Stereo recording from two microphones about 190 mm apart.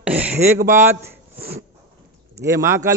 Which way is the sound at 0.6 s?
45° right (ahead or behind).